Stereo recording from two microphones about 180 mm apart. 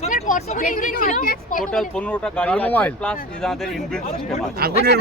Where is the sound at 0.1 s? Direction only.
45° left (ahead or behind).